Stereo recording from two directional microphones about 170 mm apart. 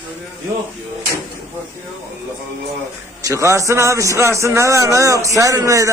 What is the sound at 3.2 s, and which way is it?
A man's voice, 15° right (ahead or behind).